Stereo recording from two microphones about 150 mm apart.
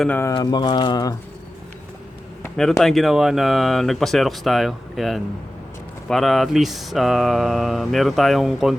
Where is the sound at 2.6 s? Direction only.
Centre (ahead or behind).